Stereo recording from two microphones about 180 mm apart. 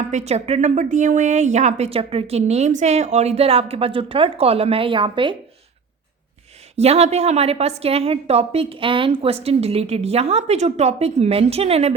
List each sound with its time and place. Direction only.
0.1 s a woman's voice: 40° right (ahead or behind)
6.7 s a woman's voice: 35° right (ahead or behind)